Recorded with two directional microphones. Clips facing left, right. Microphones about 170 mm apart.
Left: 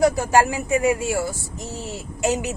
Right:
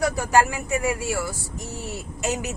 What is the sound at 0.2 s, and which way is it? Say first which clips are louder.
A woman's voice: left 2 dB; 25° left (ahead or behind).